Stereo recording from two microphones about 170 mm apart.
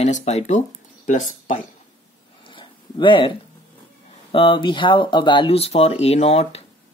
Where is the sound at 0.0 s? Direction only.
40° left (ahead or behind).